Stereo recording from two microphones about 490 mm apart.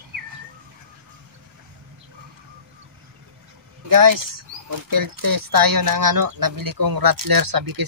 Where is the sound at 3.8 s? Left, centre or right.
Right.